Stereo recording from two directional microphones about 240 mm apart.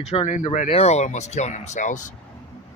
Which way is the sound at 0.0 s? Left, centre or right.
Left.